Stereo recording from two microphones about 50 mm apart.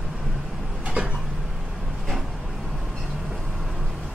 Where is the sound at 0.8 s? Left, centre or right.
Right.